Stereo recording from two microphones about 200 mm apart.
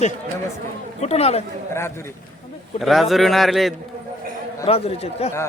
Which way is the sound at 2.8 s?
Centre (ahead or behind).